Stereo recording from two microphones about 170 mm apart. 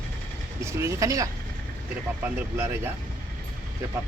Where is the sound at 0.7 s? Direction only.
20° right (ahead or behind).